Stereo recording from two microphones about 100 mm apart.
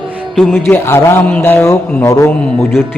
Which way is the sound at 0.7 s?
25° left (ahead or behind).